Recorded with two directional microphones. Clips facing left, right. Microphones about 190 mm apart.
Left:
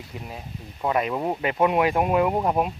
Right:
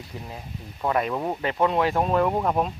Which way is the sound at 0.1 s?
15° left (ahead or behind).